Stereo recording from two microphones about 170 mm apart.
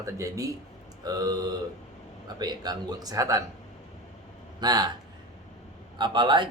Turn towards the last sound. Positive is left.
turn(degrees=-25)  # may be behind; listen again after turning